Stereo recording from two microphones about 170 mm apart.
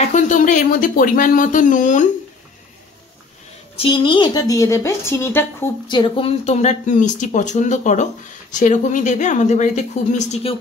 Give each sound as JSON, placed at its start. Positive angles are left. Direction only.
{"t": 0.1, "sound": "speech", "side_deg": 45}
{"t": 3.7, "sound": "a woman's voice", "side_deg": 30}
{"t": 5.9, "sound": "speech", "side_deg": 30}